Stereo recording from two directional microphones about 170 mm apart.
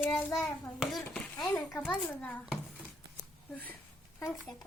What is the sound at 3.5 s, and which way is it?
Child singing, 10° left (ahead or behind).